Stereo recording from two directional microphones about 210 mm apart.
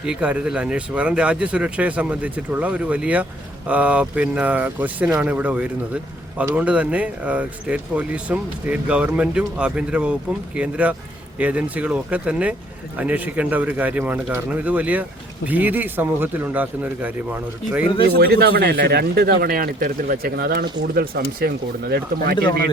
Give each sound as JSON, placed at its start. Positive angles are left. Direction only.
{"t": 0.0, "sound": "a man's voice", "side_deg": -5}
{"t": 18.0, "sound": "speech", "side_deg": -50}